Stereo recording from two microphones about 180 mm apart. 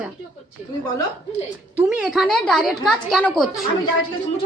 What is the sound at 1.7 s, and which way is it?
A woman's voice, 5° right (ahead or behind).